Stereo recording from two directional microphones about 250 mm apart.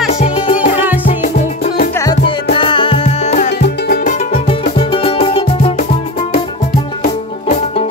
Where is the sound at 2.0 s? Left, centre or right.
Centre.